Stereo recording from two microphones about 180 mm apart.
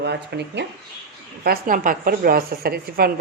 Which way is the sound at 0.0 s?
70° right (ahead or behind).